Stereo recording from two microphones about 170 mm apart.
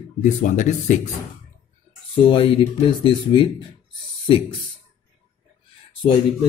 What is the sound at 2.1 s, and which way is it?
Speech, 30° left (ahead or behind).